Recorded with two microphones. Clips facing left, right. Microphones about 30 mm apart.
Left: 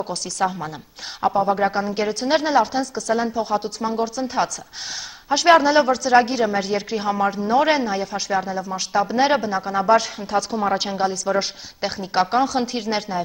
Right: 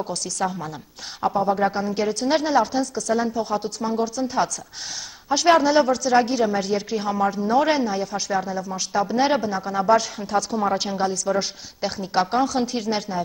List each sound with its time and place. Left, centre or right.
0.0 s a woman's voice: left